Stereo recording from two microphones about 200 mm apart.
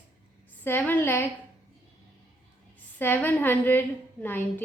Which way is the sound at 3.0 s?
10° left (ahead or behind).